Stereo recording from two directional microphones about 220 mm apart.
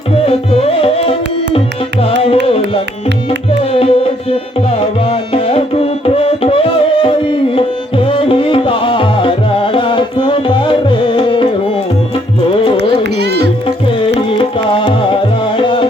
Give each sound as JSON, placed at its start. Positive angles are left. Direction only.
{"t": 0.3, "sound": "music", "side_deg": 25}
{"t": 3.6, "sound": "music", "side_deg": 25}
{"t": 12.7, "sound": "music", "side_deg": -50}
{"t": 13.7, "sound": "music", "side_deg": 25}